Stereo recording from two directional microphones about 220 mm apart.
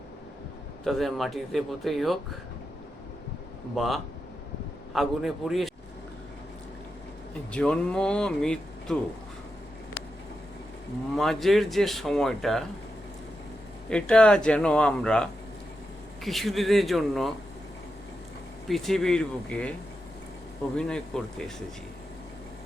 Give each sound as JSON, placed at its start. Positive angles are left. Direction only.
{"t": 0.9, "sound": "speech", "side_deg": 0}
{"t": 3.8, "sound": "speech", "side_deg": 0}
{"t": 7.5, "sound": "speech", "side_deg": 5}
{"t": 11.1, "sound": "speech", "side_deg": 0}
{"t": 13.9, "sound": "speech", "side_deg": 5}
{"t": 18.7, "sound": "speech", "side_deg": 0}
{"t": 20.7, "sound": "speech", "side_deg": 5}